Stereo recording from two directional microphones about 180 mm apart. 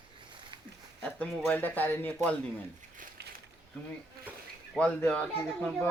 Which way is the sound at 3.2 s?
65° right (ahead or behind).